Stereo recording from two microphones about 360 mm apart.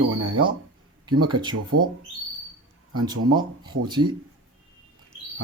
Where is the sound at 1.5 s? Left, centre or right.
Right.